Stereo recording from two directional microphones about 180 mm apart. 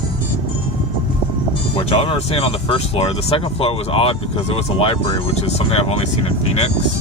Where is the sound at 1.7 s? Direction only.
35° left (ahead or behind).